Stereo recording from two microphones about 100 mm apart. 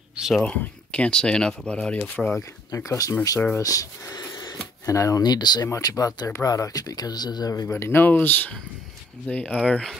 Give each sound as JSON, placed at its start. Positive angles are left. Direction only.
{"t": 0.1, "sound": "a sound", "side_deg": -5}
{"t": 0.4, "sound": "speech", "side_deg": 15}
{"t": 2.7, "sound": "speech", "side_deg": 35}
{"t": 7.6, "sound": "speech", "side_deg": 25}